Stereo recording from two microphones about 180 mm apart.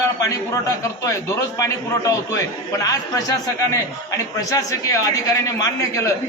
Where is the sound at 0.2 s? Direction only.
20° left (ahead or behind).